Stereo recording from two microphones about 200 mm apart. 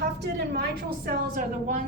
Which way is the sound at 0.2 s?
55° right (ahead or behind).